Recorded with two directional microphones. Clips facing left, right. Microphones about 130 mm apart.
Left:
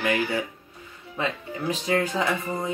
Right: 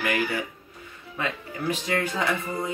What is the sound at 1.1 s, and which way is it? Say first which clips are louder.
Speech: left 2 dB; 25° left (ahead or behind).